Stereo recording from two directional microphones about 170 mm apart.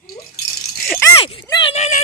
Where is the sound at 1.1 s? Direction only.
30° left (ahead or behind).